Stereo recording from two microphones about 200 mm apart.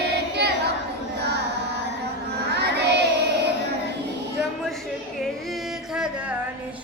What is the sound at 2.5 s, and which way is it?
Child singing, 55° right (ahead or behind).